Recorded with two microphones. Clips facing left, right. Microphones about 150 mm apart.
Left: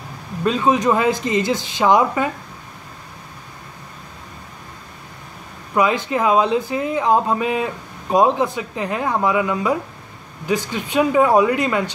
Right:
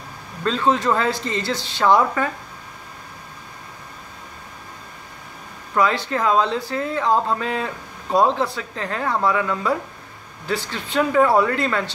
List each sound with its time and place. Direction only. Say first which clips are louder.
0.4 s speech: left 2 dB; 15° left (ahead or behind)
5.8 s speech: left 2 dB; 15° left (ahead or behind)